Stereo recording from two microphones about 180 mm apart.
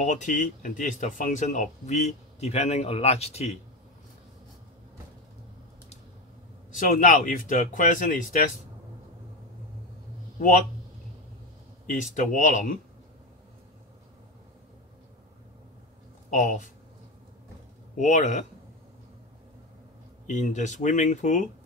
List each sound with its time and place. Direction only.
0.0 s speech: 45° left (ahead or behind)
6.7 s speech: 45° left (ahead or behind)
11.8 s speech: 45° left (ahead or behind)
16.3 s speech: 45° left (ahead or behind)
17.9 s speech: 45° left (ahead or behind)
20.2 s speech: 40° left (ahead or behind)